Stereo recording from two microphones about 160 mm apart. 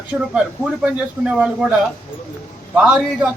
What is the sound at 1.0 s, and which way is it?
Speech, 5° right (ahead or behind).